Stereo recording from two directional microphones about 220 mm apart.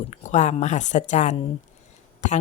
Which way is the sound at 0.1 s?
30° left (ahead or behind).